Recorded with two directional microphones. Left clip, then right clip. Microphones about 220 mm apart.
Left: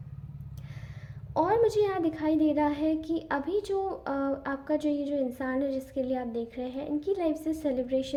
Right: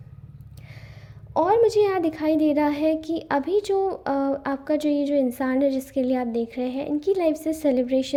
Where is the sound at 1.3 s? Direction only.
25° right (ahead or behind).